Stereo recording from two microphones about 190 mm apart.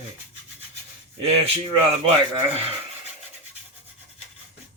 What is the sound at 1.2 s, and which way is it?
Speech, 30° right (ahead or behind).